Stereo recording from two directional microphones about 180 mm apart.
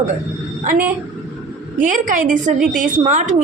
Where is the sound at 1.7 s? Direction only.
45° right (ahead or behind).